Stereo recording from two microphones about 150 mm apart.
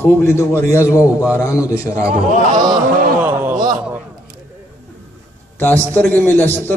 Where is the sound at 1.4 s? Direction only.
20° left (ahead or behind).